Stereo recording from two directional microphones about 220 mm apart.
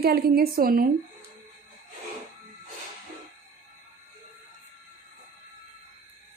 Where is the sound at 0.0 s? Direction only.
45° right (ahead or behind).